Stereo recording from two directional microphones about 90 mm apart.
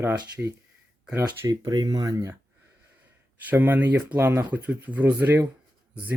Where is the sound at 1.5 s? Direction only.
45° right (ahead or behind).